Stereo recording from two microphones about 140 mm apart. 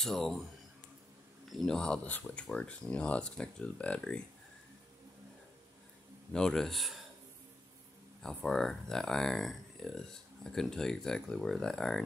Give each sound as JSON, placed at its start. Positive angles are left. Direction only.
{"t": 0.0, "sound": "speech", "side_deg": 0}
{"t": 1.5, "sound": "speech", "side_deg": 0}
{"t": 6.3, "sound": "speech", "side_deg": 5}
{"t": 8.2, "sound": "speech", "side_deg": 5}